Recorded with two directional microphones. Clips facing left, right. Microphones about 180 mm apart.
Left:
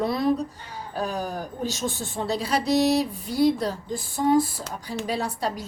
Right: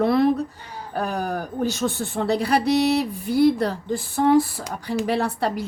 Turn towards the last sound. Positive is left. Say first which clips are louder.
# right 5 dB
turn(degrees=-60)  # may be behind; listen again after turning